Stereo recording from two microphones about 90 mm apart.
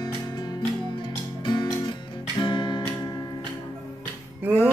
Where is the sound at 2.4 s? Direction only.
60° left (ahead or behind).